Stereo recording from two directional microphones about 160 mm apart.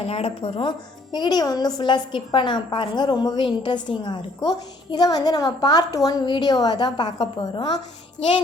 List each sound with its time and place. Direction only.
0.0 s a woman's voice: 40° left (ahead or behind)